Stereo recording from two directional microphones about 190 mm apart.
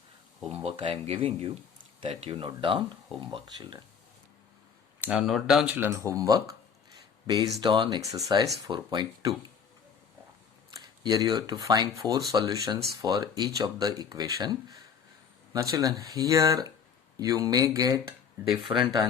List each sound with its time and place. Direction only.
0.4 s speech: 30° right (ahead or behind)
4.9 s speech: 5° right (ahead or behind); by 9.3 s 25° right (ahead or behind)
10.8 s speech: 20° right (ahead or behind)